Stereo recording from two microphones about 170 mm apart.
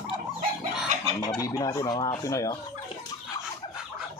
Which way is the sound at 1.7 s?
25° left (ahead or behind).